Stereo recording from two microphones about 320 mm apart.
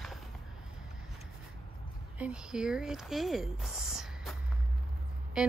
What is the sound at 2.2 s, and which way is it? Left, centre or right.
Speech, centre.